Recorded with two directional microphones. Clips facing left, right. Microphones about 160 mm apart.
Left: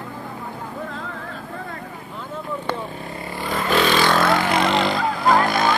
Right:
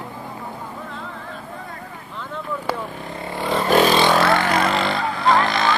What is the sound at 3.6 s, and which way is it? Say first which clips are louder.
Vehicle: right 3 dB; 40° right (ahead or behind).